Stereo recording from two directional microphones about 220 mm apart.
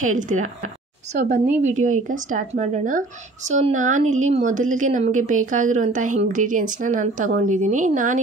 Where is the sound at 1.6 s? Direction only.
35° right (ahead or behind).